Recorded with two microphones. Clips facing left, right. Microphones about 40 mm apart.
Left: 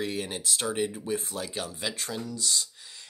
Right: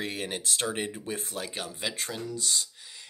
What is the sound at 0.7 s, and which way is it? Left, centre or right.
Speech, right.